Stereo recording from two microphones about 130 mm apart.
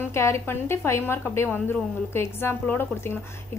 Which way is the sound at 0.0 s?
20° left (ahead or behind).